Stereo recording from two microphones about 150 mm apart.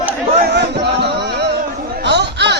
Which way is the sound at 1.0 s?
90° right.